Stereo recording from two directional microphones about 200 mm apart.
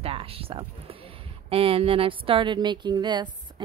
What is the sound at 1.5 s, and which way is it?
Speech, 30° right (ahead or behind).